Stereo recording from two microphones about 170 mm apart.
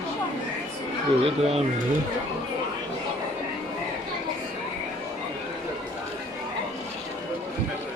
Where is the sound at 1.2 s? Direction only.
35° right (ahead or behind).